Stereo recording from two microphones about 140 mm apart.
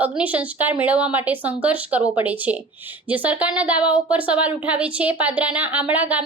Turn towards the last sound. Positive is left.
turn(degrees=-10)  # may be behind; listen again after turning